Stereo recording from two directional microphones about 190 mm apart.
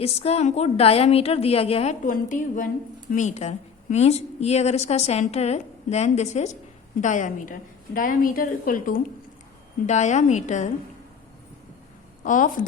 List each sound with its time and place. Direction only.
0.0 s a woman's voice: 35° left (ahead or behind)
12.2 s a woman's voice: 45° left (ahead or behind)